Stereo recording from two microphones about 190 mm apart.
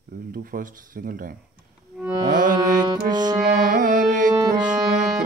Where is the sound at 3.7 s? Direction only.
45° right (ahead or behind).